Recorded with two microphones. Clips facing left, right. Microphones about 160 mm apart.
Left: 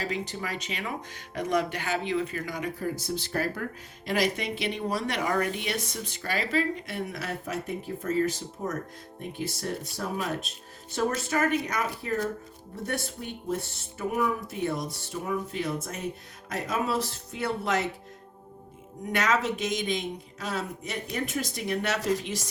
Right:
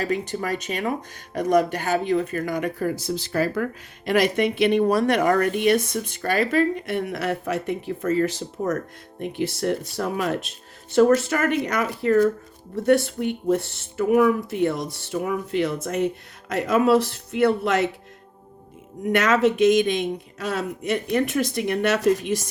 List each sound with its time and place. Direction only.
0.0 s speech: 50° right (ahead or behind); by 17.8 s 65° right (ahead or behind)
19.1 s speech: 60° right (ahead or behind)